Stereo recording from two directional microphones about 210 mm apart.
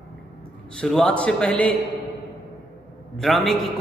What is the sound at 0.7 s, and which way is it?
A man's voice, 5° left (ahead or behind).